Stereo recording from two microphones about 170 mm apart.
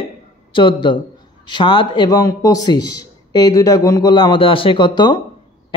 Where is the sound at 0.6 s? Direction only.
30° left (ahead or behind).